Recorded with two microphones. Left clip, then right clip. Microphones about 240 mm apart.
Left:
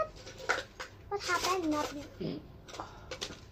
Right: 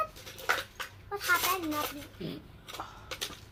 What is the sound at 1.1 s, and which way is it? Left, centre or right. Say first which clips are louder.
Speech: right 3 dB; right.